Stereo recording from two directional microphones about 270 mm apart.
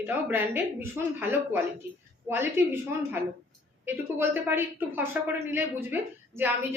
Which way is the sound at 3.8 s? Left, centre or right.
Centre.